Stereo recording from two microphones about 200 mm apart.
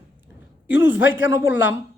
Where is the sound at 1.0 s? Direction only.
70° left (ahead or behind).